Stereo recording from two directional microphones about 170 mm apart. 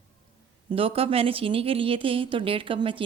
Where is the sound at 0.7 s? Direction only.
35° right (ahead or behind).